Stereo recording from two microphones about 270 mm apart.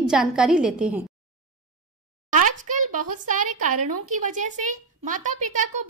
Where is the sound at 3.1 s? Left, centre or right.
Right.